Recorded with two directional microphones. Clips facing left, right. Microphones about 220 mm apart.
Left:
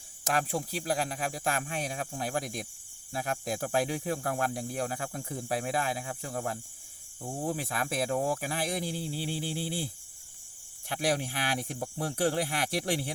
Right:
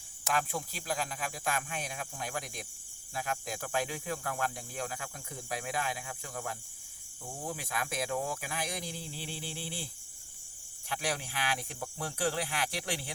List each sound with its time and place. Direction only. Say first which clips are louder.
0.3 s speech: left 3 dB; 35° left (ahead or behind)